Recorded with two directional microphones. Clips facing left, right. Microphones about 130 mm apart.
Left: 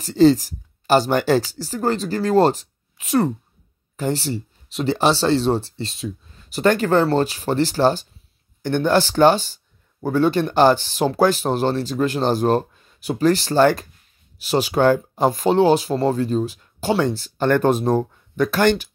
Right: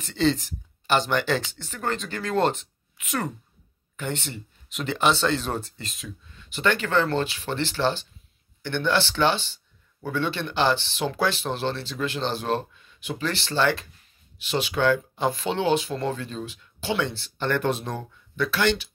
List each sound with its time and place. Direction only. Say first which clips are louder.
0.0 s speech: left 9 dB; 40° left (ahead or behind)